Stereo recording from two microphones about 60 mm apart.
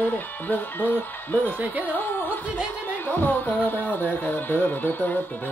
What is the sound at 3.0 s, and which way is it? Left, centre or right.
Speech, left.